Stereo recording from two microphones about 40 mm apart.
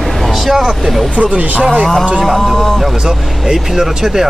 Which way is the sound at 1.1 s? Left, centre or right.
Right.